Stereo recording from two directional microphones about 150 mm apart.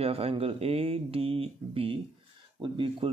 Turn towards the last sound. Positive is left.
turn(degrees=-35)  # may be behind; listen again after turning